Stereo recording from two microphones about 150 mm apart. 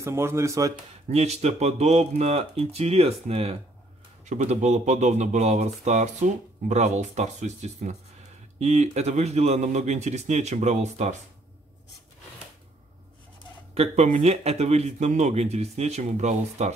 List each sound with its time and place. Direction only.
0.0 s speech: 15° right (ahead or behind)
1.1 s speech: 45° right (ahead or behind)
13.7 s speech: 45° right (ahead or behind)